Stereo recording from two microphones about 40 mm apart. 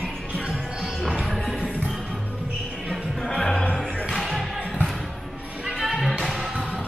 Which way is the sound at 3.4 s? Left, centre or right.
Left.